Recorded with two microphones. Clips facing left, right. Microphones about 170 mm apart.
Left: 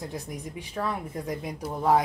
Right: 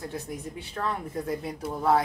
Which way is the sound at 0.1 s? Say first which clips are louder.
Right 1 dB; 10° left (ahead or behind).